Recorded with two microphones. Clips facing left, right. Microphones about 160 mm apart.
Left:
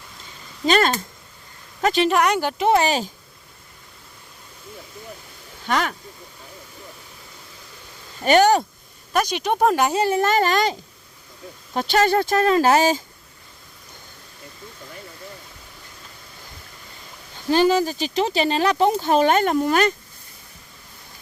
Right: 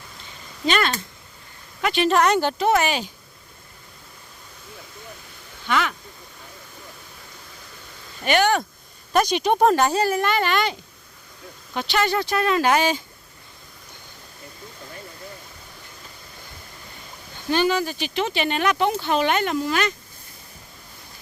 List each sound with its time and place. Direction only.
0.6 s speech: 40° left (ahead or behind)
2.0 s speech: 15° left (ahead or behind)
2.6 s speech: 30° left (ahead or behind)
5.6 s speech: 40° left (ahead or behind)
8.2 s speech: 40° left (ahead or behind)
9.1 s speech: 5° left (ahead or behind)
9.7 s a child's voice: 20° left (ahead or behind)
10.2 s speech: 40° left (ahead or behind)
17.5 s speech: 35° left (ahead or behind)